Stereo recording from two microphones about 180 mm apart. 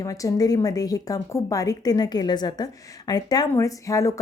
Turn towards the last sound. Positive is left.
turn(degrees=15)  # may be behind; listen again after turning